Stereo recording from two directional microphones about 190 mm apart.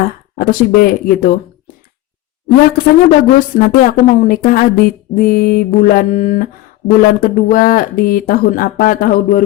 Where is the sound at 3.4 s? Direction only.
45° left (ahead or behind).